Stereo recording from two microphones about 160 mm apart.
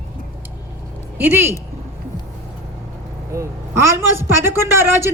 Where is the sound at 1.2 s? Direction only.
15° right (ahead or behind).